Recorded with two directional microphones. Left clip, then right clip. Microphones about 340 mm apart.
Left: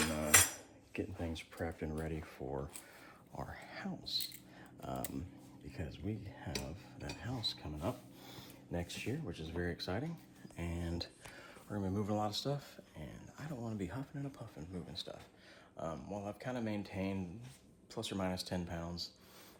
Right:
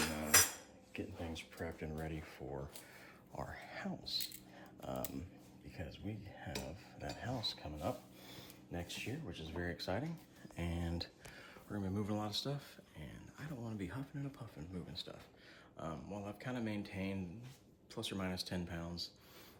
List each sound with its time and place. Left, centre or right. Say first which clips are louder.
0.9 s speech: left 3 dB; centre